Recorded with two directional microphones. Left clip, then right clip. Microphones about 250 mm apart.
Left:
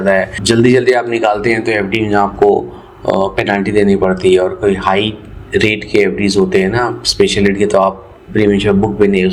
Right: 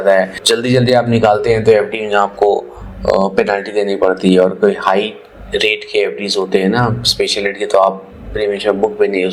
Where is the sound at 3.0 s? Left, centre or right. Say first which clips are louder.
Right 1 dB; right.